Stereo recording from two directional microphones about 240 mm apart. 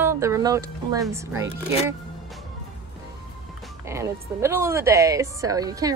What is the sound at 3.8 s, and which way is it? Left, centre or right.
A woman's voice, centre.